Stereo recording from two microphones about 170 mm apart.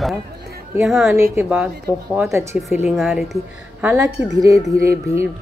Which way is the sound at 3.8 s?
20° right (ahead or behind).